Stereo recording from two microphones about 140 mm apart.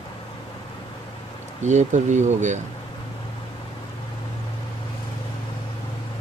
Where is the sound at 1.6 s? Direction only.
60° right (ahead or behind).